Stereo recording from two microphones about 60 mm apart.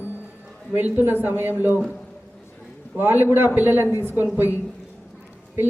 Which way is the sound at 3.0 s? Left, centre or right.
Right.